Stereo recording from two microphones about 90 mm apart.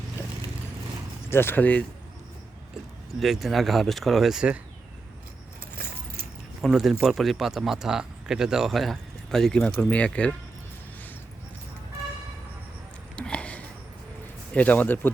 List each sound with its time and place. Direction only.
1.3 s speech: 25° left (ahead or behind)
2.7 s speech: centre (ahead or behind)
6.6 s speech: 5° right (ahead or behind); by 10.3 s 15° left (ahead or behind)
13.1 s sniff: 10° left (ahead or behind)
14.5 s a man's voice: 15° left (ahead or behind)